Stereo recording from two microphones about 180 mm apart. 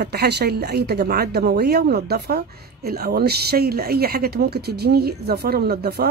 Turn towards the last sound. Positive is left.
turn(degrees=-60)  # may be behind; listen again after turning